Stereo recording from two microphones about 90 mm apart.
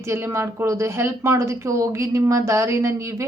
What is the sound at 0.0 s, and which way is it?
A woman's voice, 30° right (ahead or behind).